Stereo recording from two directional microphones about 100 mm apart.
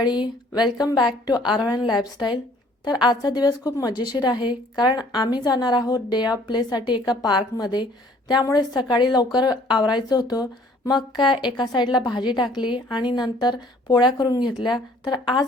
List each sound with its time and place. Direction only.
0.0 s a woman's voice: 45° left (ahead or behind)